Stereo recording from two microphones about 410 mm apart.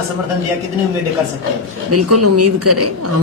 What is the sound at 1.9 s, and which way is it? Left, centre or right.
Speech, right.